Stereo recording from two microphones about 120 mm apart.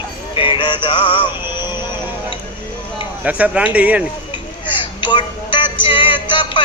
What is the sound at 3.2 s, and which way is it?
Speech, 10° right (ahead or behind).